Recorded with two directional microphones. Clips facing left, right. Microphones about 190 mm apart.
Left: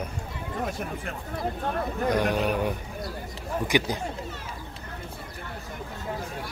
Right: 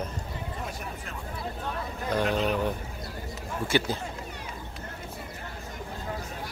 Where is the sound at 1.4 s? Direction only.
50° left (ahead or behind).